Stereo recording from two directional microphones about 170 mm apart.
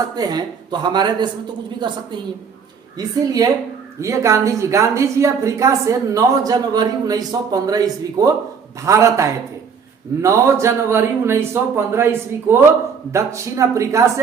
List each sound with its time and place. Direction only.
0.0 s speech: 25° right (ahead or behind)
3.4 s speech: 20° right (ahead or behind)